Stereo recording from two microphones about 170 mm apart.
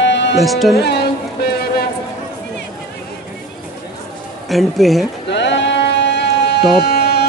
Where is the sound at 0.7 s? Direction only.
70° left (ahead or behind).